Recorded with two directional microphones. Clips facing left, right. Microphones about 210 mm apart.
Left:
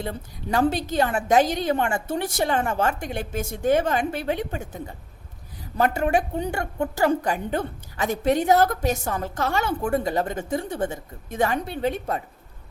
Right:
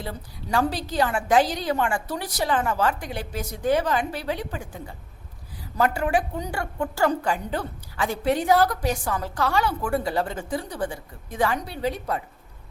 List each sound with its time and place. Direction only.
0.0 s a woman's voice: 20° left (ahead or behind)
3.6 s a woman's voice: 50° left (ahead or behind)
4.4 s a woman's voice: 25° left (ahead or behind)